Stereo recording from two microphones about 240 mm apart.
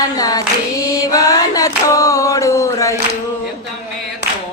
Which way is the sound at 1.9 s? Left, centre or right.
Centre.